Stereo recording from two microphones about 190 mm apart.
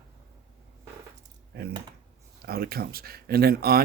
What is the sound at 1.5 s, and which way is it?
Typing, 55° right (ahead or behind).